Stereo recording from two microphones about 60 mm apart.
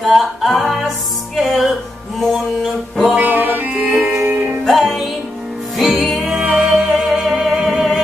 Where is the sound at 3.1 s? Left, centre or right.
Right.